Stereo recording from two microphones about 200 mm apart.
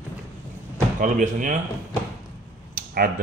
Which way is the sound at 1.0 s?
40° right (ahead or behind).